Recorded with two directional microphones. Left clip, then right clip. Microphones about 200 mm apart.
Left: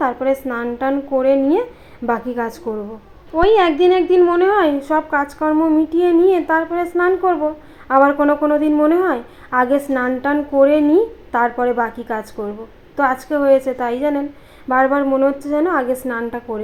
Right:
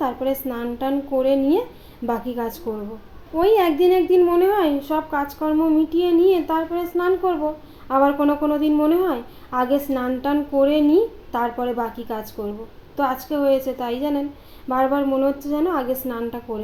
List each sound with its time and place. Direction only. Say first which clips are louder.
0.0 s a woman's voice: left 5 dB; 10° left (ahead or behind)
4.8 s humming: left 5 dB; 25° left (ahead or behind)
7.9 s speech: left 5 dB; 20° left (ahead or behind)
13.3 s humming: left 6 dB; 20° left (ahead or behind)
15.4 s speech: left 5 dB; 20° left (ahead or behind)